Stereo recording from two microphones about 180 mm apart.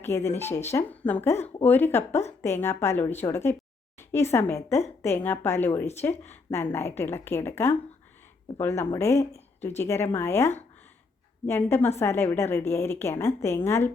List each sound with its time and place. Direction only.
0.0 s a woman's voice: 15° left (ahead or behind)